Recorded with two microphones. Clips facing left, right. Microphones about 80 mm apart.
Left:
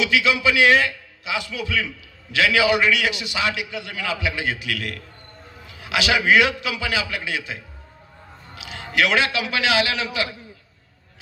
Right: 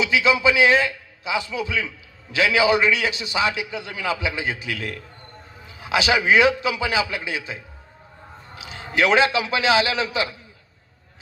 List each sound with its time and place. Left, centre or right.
0.0 s a man's voice: right